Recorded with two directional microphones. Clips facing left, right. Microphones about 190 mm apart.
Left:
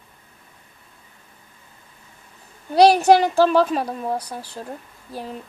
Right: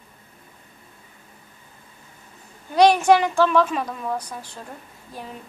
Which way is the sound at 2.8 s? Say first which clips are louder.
Left 2 dB; 35° left (ahead or behind).